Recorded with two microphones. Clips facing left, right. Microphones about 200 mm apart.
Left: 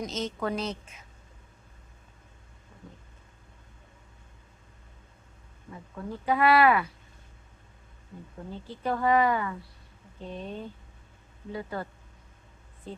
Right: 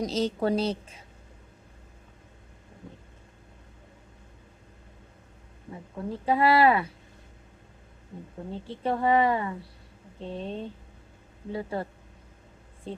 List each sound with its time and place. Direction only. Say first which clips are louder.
0.0 s a woman's voice: right 5 dB; 35° right (ahead or behind)
5.7 s a woman's voice: right 3 dB; 25° right (ahead or behind)
8.4 s a woman's voice: right 3 dB; 30° right (ahead or behind)